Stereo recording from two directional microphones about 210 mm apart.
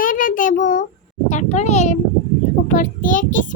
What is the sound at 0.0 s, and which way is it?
Child singing, 40° left (ahead or behind).